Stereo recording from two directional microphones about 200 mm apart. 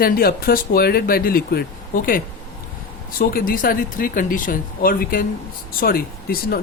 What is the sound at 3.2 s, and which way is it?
Speech, 45° left (ahead or behind).